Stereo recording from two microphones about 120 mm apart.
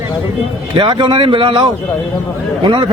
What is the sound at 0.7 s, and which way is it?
Speech, 40° right (ahead or behind).